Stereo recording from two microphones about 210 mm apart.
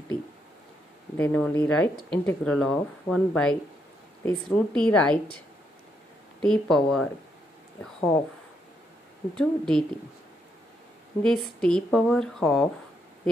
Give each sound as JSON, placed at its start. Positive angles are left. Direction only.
{"t": 1.1, "sound": "speech", "side_deg": 10}
{"t": 6.4, "sound": "speech", "side_deg": 0}
{"t": 9.3, "sound": "speech", "side_deg": 5}
{"t": 11.2, "sound": "speech", "side_deg": 5}